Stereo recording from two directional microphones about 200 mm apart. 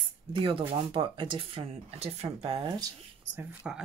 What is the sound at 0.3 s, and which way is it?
Speech, 25° right (ahead or behind).